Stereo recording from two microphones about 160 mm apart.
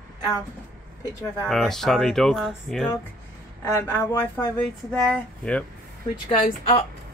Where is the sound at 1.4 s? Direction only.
Centre (ahead or behind).